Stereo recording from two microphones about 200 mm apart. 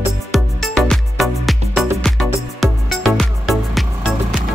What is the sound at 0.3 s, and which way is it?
Music, centre (ahead or behind).